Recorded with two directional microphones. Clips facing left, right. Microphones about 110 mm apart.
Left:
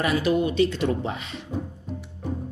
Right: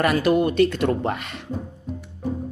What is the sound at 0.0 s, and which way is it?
Speech, 55° right (ahead or behind).